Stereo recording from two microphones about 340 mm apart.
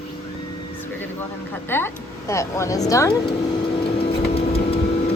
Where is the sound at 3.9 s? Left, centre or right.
Centre.